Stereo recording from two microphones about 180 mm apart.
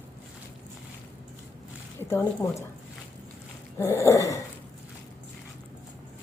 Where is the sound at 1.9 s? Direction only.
15° left (ahead or behind).